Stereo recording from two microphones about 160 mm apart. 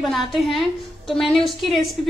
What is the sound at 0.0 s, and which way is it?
A woman's voice, centre (ahead or behind).